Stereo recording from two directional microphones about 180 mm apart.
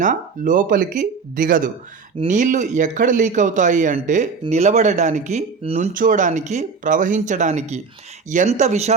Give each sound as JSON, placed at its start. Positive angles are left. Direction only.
{"t": 0.0, "sound": "speech", "side_deg": -45}